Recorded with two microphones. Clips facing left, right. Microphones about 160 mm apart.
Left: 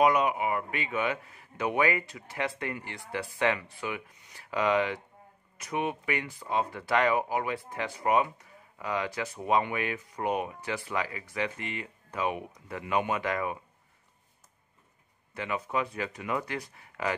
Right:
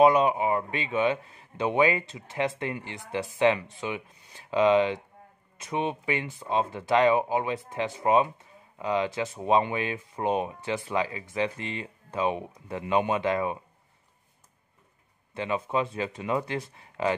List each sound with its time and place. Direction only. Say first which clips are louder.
0.0 s speech: right 4 dB; 30° right (ahead or behind)
15.3 s speech: right 4 dB; 25° right (ahead or behind)